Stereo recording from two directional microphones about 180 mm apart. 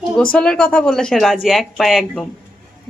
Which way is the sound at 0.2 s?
5° left (ahead or behind).